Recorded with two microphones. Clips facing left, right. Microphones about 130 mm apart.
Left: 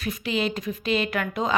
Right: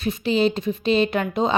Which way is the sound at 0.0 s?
30° right (ahead or behind).